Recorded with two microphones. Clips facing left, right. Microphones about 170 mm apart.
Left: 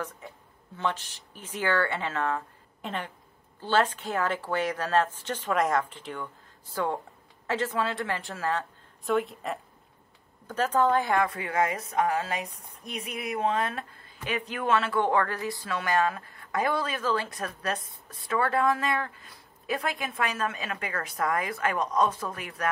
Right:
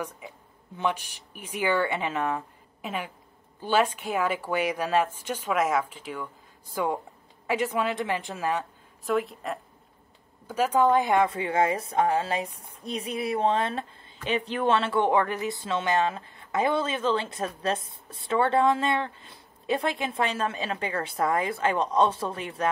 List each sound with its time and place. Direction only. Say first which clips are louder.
0.7 s a woman's voice: right 2 dB; 15° right (ahead or behind)
9.0 s speech: even; centre (ahead or behind); by 22.7 s 25° right (ahead or behind)